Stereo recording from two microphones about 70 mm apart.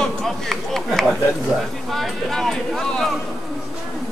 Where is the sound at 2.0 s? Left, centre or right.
Centre.